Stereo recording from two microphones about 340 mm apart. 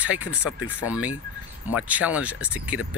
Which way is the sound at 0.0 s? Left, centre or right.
Centre.